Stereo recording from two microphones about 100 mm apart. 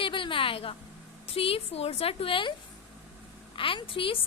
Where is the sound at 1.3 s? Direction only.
75° left (ahead or behind).